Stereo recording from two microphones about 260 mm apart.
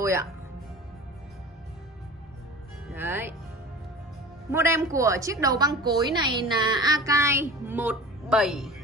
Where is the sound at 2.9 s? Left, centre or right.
Centre.